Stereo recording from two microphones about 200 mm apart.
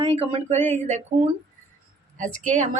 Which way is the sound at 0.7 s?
35° right (ahead or behind).